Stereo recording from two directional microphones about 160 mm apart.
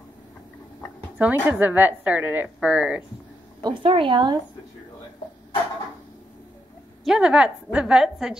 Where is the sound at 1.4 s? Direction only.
10° right (ahead or behind).